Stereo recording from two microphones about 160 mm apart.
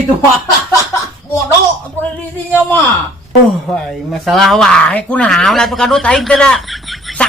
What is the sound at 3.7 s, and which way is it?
Speech, centre (ahead or behind).